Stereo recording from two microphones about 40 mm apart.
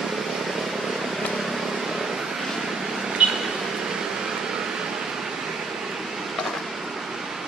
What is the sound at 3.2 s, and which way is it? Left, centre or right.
Air conditioning, right.